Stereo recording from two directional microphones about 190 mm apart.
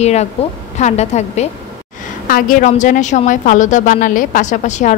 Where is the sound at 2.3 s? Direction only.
45° left (ahead or behind).